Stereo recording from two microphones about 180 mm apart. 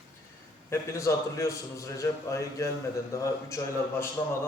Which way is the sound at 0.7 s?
15° left (ahead or behind).